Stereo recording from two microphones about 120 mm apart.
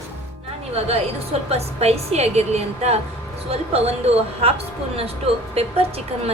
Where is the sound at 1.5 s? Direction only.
60° right (ahead or behind).